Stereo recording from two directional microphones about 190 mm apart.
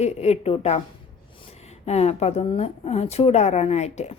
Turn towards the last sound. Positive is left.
turn(degrees=35)  # may be behind; listen again after turning